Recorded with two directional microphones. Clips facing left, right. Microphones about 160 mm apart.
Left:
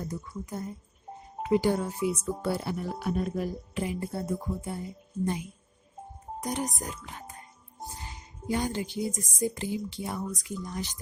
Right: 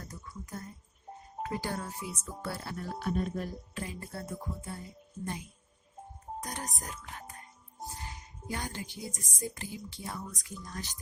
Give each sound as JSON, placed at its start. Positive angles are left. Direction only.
{"t": 0.0, "sound": "speech", "side_deg": 20}
{"t": 3.8, "sound": "speech", "side_deg": 20}
{"t": 6.4, "sound": "speech", "side_deg": 20}